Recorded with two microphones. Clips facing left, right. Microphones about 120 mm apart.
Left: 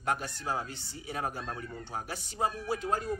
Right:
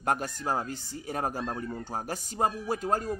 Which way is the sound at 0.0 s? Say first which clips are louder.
Right 4 dB; 45° right (ahead or behind).